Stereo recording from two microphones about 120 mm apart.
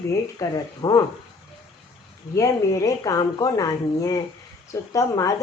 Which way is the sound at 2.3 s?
30° left (ahead or behind).